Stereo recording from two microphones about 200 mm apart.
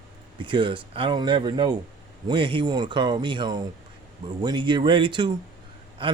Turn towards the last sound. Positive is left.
turn(degrees=-25)  # may be behind; listen again after turning